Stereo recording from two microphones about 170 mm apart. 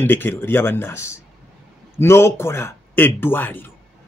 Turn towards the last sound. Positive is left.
turn(degrees=10)  # may be behind; listen again after turning